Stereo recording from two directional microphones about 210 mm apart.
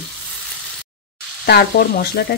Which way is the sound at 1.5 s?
50° left (ahead or behind).